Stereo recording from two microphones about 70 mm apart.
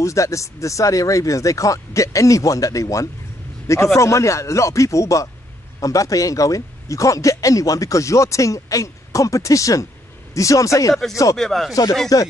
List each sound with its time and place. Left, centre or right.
0.0 s a man's voice: left
11.3 s speech: centre
12.1 s a man's voice: left